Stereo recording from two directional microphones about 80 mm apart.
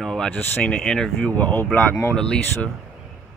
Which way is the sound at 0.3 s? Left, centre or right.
Left.